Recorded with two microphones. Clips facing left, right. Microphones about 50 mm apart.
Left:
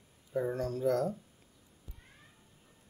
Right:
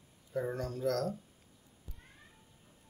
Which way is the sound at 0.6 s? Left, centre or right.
Left.